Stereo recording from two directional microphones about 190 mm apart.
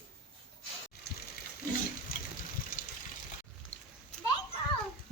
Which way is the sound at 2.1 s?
50° left (ahead or behind).